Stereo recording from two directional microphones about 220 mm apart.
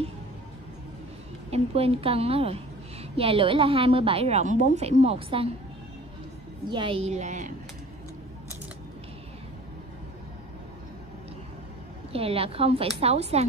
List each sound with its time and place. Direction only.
1.5 s a woman's voice: 25° right (ahead or behind)
6.7 s a woman's voice: 25° right (ahead or behind)
12.1 s a woman's voice: 25° right (ahead or behind)